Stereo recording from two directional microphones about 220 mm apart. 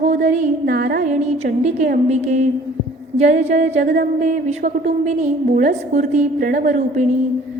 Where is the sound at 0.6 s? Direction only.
45° right (ahead or behind).